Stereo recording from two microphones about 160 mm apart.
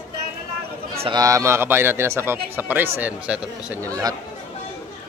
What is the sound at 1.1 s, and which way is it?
A man's voice, 20° right (ahead or behind).